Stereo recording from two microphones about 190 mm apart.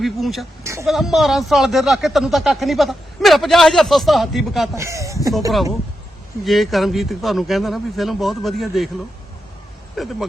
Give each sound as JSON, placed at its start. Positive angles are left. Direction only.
{"t": 0.0, "sound": "speech", "side_deg": 0}
{"t": 0.6, "sound": "a woman's voice", "side_deg": -15}
{"t": 0.9, "sound": "speech", "side_deg": 0}
{"t": 4.7, "sound": "speech", "side_deg": -15}
{"t": 6.4, "sound": "speech", "side_deg": 0}
{"t": 9.9, "sound": "speech", "side_deg": 0}